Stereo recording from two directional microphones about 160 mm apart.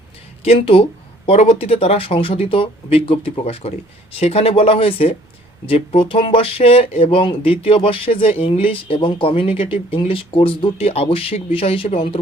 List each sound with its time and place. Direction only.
0.4 s speech: 40° left (ahead or behind)